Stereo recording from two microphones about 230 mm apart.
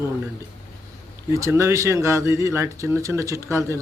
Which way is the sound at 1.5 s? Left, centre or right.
Centre.